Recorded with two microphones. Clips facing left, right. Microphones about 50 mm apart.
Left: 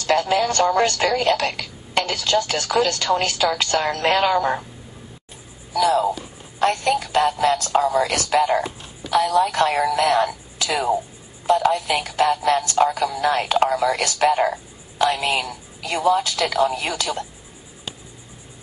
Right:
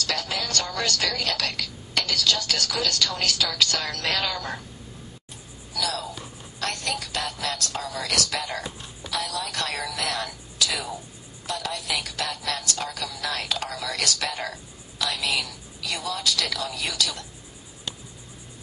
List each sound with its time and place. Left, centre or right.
0.0 s speech: left
5.7 s a sound: left
6.6 s a woman's voice: left